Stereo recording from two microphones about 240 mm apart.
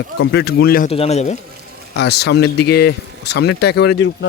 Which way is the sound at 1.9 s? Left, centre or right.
Left.